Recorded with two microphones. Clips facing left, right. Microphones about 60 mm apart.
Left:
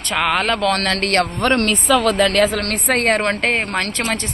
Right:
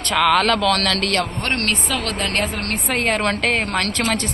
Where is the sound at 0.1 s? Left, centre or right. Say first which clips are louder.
Right 2 dB; centre; by 1.3 s left.